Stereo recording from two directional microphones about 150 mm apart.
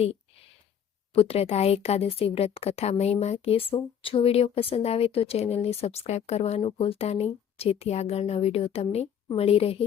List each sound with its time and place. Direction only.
1.1 s speech: 40° left (ahead or behind)